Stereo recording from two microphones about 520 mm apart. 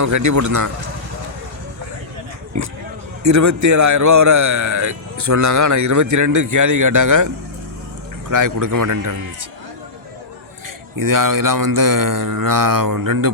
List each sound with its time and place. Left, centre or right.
0.0 s a man's voice: right
3.2 s a man's voice: right
8.3 s a man's voice: right
10.9 s a man's voice: right